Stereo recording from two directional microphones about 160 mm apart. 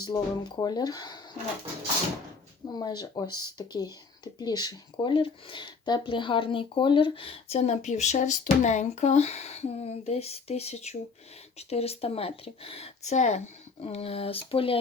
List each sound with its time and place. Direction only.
0.0 s speech: 25° left (ahead or behind)
2.7 s speech: 25° left (ahead or behind)